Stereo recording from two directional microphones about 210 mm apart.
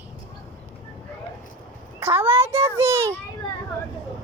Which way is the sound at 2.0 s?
10° right (ahead or behind).